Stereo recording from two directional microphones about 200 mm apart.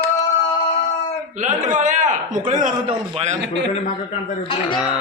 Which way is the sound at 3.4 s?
60° right (ahead or behind).